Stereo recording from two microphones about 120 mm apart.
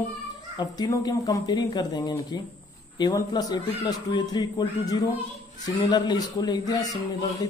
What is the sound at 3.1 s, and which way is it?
Speech, 35° left (ahead or behind).